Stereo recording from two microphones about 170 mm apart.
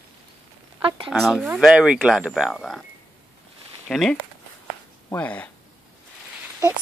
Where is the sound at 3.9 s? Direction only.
Centre (ahead or behind).